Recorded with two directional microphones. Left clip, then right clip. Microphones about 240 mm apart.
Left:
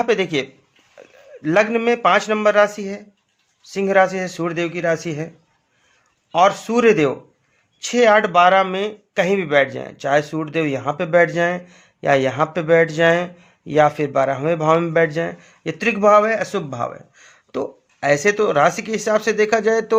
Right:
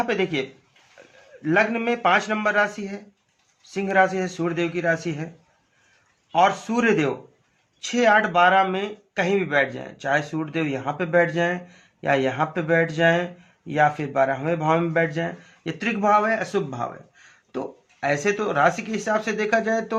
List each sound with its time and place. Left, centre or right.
0.0 s speech: left
6.3 s speech: left